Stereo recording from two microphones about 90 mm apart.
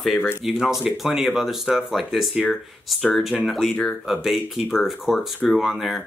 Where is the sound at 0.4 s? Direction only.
5° right (ahead or behind).